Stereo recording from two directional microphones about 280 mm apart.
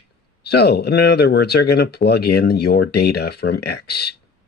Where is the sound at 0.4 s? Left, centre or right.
Left.